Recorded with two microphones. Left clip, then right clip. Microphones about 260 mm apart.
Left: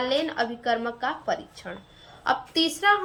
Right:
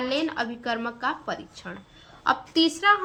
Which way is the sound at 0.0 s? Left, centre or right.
Centre.